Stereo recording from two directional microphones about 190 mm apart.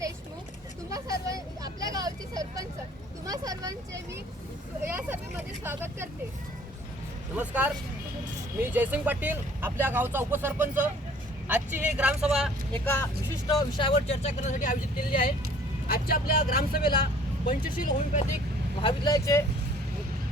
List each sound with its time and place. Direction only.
0.9 s vehicle: 20° right (ahead or behind)
3.2 s speech: 20° right (ahead or behind)
7.3 s speech: 10° right (ahead or behind)
12.8 s speech: 10° left (ahead or behind)
13.5 s speech: 25° left (ahead or behind); by 14.8 s 40° left (ahead or behind)
15.9 s speech: 50° left (ahead or behind)
18.8 s speech: 25° left (ahead or behind)